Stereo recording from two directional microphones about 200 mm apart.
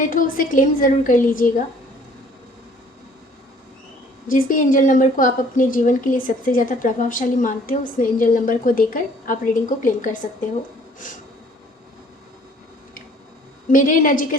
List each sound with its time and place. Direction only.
0.0 s a woman's voice: 40° left (ahead or behind)
4.3 s a woman's voice: 45° left (ahead or behind)
13.7 s a woman's voice: 40° left (ahead or behind)